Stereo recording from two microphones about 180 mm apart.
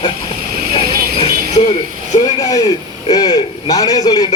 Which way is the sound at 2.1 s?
20° left (ahead or behind).